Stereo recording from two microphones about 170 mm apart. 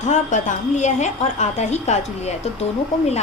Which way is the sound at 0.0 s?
45° left (ahead or behind).